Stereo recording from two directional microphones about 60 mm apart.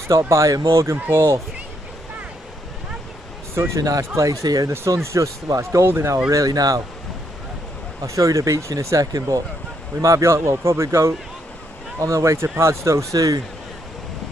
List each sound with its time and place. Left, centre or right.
0.1 s speech: right
3.8 s speech: right
4.1 s speech: right
4.9 s speech: right
5.8 s speech: right
6.3 s speech: right
8.0 s speech: right
10.0 s speech: right